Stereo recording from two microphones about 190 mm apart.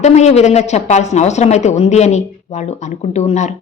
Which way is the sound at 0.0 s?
35° left (ahead or behind).